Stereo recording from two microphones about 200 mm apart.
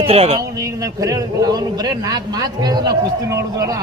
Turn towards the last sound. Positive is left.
turn(degrees=-15)  # may be behind; listen again after turning